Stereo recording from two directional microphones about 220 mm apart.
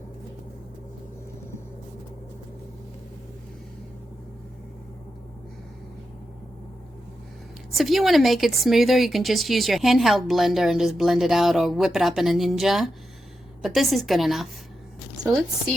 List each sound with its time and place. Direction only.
7.7 s speech: centre (ahead or behind)